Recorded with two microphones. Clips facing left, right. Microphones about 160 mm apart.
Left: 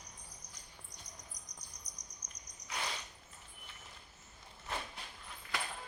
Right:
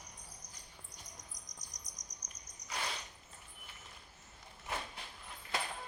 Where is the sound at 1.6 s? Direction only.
90° right.